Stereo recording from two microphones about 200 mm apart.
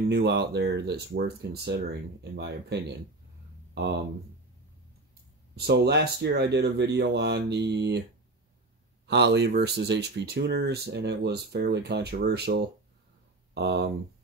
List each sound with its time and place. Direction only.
0.1 s speech: 55° right (ahead or behind)
5.7 s speech: 55° right (ahead or behind)
9.0 s speech: 60° right (ahead or behind)